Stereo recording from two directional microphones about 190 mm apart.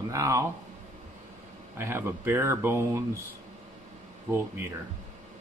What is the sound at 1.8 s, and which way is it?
Speech, 10° right (ahead or behind).